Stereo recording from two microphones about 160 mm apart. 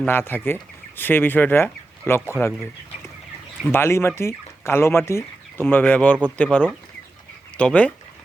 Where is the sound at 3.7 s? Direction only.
15° left (ahead or behind).